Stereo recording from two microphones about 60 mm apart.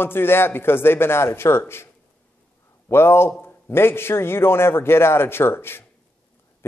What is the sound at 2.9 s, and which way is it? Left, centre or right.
A man's voice, left.